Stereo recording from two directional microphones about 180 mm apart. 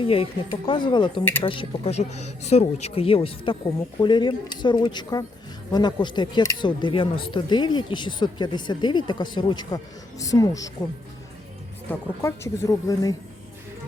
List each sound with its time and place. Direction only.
0.0 s speech: 30° left (ahead or behind)
1.2 s speech: 10° left (ahead or behind)
1.5 s speech: 30° left (ahead or behind)
11.9 s speech: 15° left (ahead or behind)